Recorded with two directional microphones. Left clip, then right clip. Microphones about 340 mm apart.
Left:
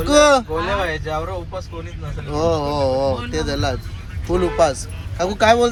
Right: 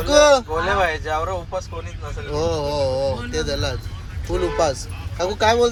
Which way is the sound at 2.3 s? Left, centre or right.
Centre.